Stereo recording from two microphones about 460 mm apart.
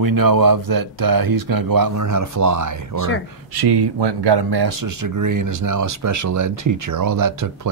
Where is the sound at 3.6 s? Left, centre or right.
Right.